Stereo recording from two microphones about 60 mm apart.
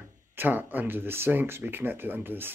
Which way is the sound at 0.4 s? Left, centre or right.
Right.